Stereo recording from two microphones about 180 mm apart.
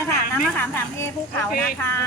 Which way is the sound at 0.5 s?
10° left (ahead or behind).